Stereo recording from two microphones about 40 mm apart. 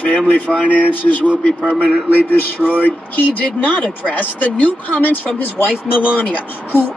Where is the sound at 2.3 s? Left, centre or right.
Left.